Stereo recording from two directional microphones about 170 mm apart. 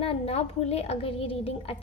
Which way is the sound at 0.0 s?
35° left (ahead or behind).